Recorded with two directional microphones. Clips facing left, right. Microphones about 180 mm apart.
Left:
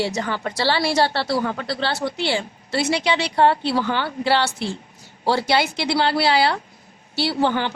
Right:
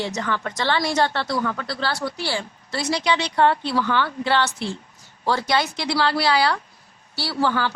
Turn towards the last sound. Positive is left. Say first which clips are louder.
# left 2 dB
turn(degrees=20)  # may be behind; listen again after turning